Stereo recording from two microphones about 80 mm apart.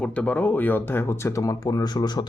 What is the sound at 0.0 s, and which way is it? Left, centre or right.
Speech, centre.